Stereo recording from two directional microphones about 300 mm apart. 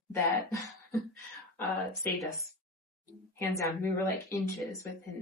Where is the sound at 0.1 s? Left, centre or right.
Centre.